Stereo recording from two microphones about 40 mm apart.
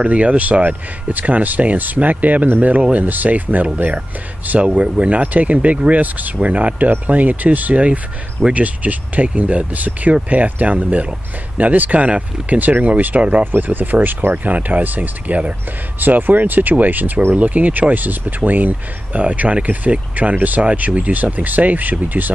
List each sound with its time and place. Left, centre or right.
0.0 s speech: right
13.4 s speech: right
16.0 s speech: right